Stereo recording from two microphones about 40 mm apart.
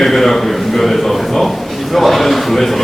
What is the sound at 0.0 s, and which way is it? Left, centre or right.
A man's voice, centre.